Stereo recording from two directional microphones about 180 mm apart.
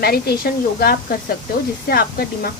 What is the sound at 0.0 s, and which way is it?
Speech, 60° left (ahead or behind).